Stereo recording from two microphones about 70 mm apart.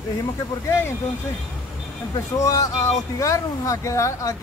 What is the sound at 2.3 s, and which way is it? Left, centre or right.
Speech, left.